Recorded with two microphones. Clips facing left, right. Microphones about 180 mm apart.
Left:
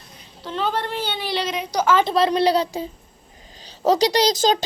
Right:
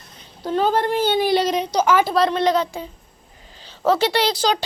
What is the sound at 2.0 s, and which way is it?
Speech, centre (ahead or behind).